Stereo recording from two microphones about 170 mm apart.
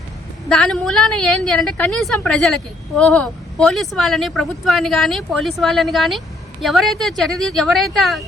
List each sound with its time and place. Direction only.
0.4 s a woman's voice: 5° left (ahead or behind)